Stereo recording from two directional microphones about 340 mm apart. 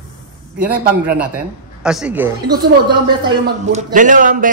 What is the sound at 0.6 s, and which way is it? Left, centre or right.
A man's voice, centre.